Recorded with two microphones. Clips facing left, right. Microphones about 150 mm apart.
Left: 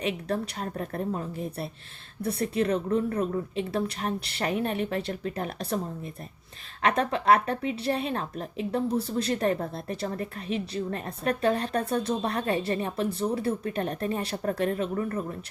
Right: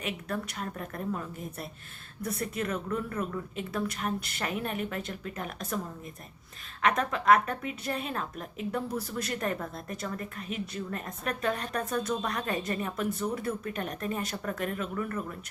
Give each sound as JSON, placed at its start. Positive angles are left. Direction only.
{"t": 0.0, "sound": "a woman's voice", "side_deg": 35}
{"t": 6.8, "sound": "a woman's voice", "side_deg": 30}